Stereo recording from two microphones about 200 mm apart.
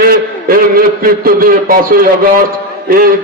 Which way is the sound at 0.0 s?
45° right (ahead or behind).